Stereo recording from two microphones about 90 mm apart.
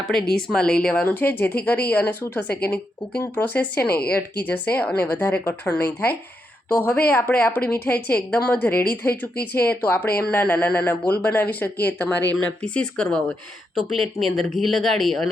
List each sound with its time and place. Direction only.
0.0 s a woman's voice: 5° left (ahead or behind)
13.7 s speech: centre (ahead or behind)